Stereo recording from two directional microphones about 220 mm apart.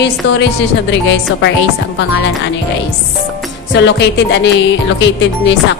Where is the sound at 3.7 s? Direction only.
50° left (ahead or behind).